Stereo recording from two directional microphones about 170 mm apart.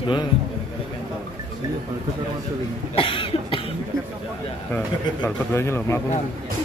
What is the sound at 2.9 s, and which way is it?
Cough, 30° left (ahead or behind).